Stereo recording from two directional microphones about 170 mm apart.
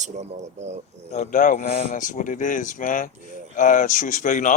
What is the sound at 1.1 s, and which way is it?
Speech, 45° left (ahead or behind).